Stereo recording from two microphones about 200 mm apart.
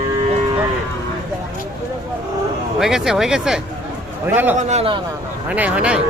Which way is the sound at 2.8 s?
Centre (ahead or behind).